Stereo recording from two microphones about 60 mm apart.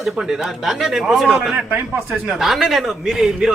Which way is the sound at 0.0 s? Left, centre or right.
Centre.